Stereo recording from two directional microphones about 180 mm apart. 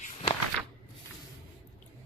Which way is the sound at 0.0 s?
40° left (ahead or behind).